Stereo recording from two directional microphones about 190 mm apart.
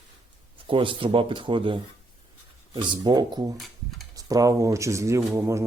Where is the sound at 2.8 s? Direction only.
25° right (ahead or behind).